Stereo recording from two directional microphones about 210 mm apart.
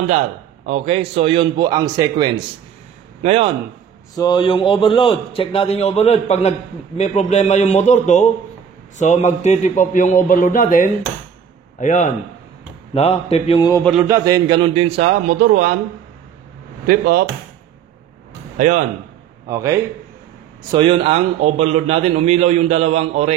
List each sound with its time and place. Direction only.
0.7 s a man's voice: 30° right (ahead or behind)
4.2 s a man's voice: 20° left (ahead or behind)
14.0 s a man's voice: 15° right (ahead or behind); by 15.7 s 40° right (ahead or behind)
16.8 s speech: 45° right (ahead or behind)
19.4 s a man's voice: 15° right (ahead or behind)
20.7 s a man's voice: 25° right (ahead or behind)